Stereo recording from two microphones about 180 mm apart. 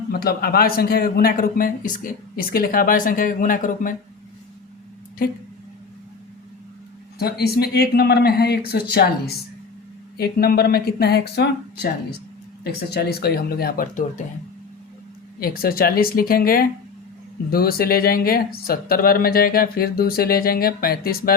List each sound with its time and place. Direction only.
0.1 s a man's voice: 55° left (ahead or behind)
7.2 s speech: 60° left (ahead or behind)
15.4 s speech: 55° left (ahead or behind)